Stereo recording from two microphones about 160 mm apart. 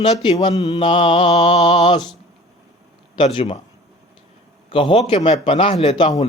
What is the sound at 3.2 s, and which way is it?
Speech, 35° left (ahead or behind).